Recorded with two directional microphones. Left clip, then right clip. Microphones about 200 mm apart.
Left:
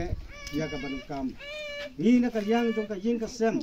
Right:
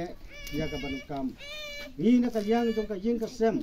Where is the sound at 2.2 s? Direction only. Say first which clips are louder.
Even; 10° right (ahead or behind).